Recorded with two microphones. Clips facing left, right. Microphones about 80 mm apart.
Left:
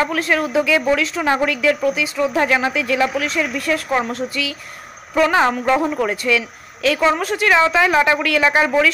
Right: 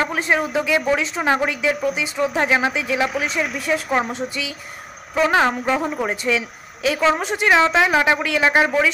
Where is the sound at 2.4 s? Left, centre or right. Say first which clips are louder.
Left 2 dB; centre.